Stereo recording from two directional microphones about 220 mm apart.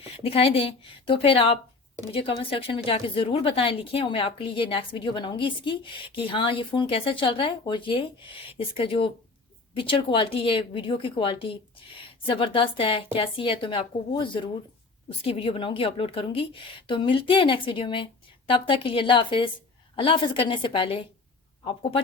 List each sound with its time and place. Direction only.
0.2 s a woman's voice: 25° left (ahead or behind)